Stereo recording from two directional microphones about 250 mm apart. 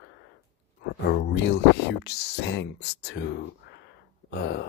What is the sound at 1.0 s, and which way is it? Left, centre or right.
Speech, left.